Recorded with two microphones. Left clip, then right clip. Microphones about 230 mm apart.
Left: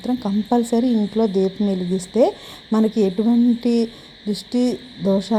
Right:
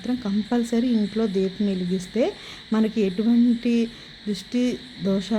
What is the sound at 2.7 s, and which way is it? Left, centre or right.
Speech, centre.